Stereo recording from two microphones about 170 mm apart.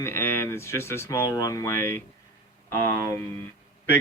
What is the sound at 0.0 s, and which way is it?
Speech, 15° left (ahead or behind).